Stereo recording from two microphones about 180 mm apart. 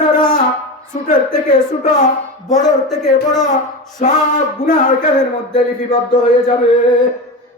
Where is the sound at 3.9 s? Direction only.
40° left (ahead or behind).